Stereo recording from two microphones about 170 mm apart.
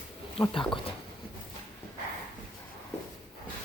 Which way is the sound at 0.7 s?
30° left (ahead or behind).